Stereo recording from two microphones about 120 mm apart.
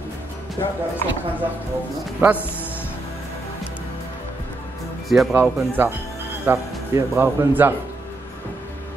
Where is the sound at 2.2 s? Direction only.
15° right (ahead or behind).